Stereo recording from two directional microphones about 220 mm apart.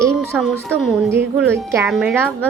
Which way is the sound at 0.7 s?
5° left (ahead or behind).